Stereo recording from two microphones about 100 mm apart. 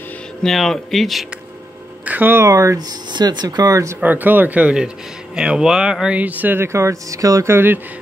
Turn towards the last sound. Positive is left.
turn(degrees=-25)  # may be behind; listen again after turning